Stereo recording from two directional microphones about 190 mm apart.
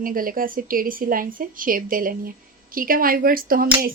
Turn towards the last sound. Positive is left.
turn(degrees=-50)  # may be behind; listen again after turning